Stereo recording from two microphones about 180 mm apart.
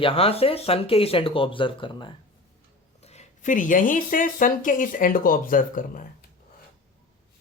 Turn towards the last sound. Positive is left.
turn(degrees=50)  # may be behind; listen again after turning